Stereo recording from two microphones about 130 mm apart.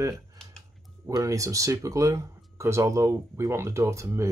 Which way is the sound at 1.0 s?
25° right (ahead or behind).